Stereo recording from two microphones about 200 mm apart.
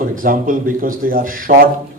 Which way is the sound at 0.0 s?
45° right (ahead or behind).